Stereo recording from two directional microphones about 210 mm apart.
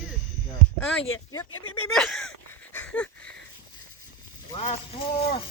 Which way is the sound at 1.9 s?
Centre (ahead or behind).